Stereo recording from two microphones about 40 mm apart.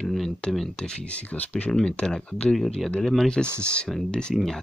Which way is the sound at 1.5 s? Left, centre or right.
Left.